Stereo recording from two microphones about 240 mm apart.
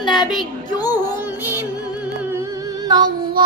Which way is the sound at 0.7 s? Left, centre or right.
Centre.